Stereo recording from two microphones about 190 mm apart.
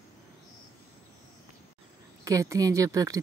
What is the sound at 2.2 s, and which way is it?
Speech, 15° right (ahead or behind).